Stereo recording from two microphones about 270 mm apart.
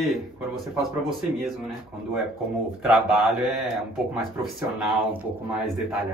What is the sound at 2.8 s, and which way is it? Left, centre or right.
Speech, centre.